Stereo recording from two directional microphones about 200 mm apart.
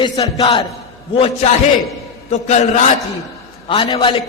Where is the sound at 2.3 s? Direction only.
35° left (ahead or behind).